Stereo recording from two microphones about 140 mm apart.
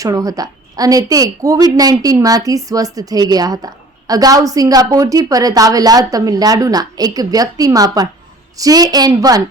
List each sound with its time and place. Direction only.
0.0 s a woman's voice: 25° right (ahead or behind)